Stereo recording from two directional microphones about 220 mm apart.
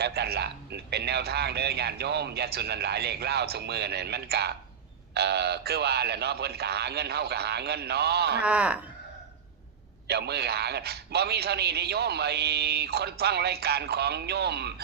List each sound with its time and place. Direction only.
0.0 s a man's voice: 45° right (ahead or behind)
8.4 s speech: 5° right (ahead or behind)
10.1 s a man's voice: 50° right (ahead or behind)